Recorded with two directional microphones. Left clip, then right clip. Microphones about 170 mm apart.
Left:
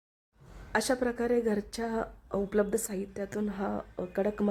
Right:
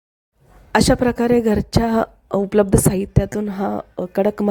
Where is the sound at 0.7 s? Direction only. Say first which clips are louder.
Right 13 dB; 50° right (ahead or behind).